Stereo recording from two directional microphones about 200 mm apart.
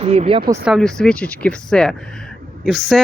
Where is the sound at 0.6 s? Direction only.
Centre (ahead or behind).